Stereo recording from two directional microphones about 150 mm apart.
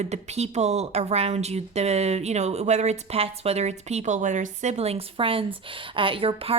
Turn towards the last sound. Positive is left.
turn(degrees=-40)  # may be behind; listen again after turning